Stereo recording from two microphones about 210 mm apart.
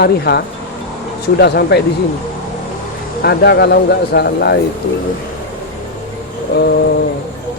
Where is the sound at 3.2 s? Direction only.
50° left (ahead or behind).